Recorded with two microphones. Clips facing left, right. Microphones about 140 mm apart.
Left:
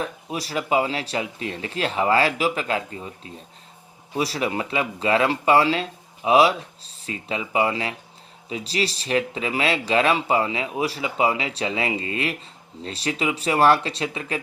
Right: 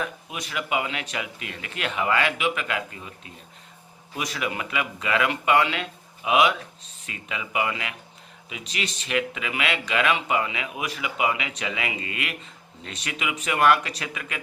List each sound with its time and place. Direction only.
0.0 s speech: 35° left (ahead or behind)